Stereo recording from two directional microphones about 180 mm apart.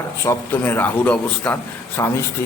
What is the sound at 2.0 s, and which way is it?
Speech, 20° left (ahead or behind).